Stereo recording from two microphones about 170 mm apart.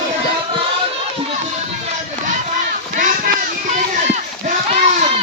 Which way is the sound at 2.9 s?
50° right (ahead or behind).